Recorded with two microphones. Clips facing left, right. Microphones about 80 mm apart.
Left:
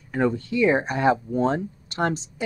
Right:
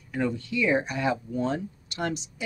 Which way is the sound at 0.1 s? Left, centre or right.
Left.